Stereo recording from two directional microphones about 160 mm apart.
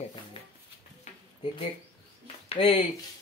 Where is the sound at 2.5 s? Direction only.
35° left (ahead or behind).